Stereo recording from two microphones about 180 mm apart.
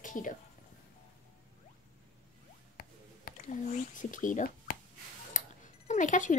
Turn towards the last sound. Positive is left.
turn(degrees=45)  # may be behind; listen again after turning